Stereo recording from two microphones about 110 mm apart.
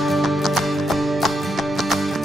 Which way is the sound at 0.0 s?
Centre (ahead or behind).